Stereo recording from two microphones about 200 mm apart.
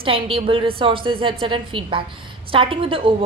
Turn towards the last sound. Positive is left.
turn(degrees=-25)  # may be behind; listen again after turning